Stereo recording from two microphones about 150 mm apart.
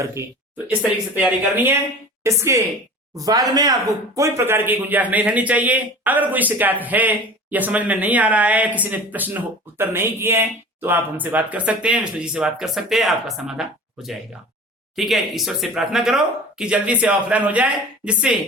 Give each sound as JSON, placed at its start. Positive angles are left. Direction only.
{"t": 0.0, "sound": "speech", "side_deg": -20}